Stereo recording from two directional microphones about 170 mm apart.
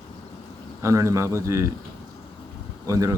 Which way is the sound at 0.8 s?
15° right (ahead or behind).